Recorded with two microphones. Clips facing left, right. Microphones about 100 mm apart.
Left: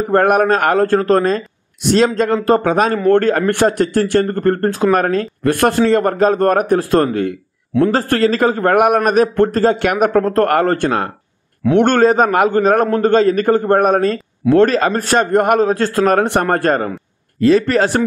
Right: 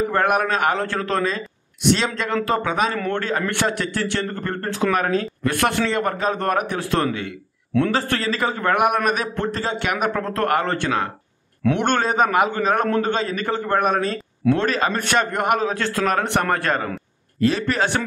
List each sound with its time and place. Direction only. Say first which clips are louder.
0.0 s a man's voice: left 7 dB; 45° left (ahead or behind)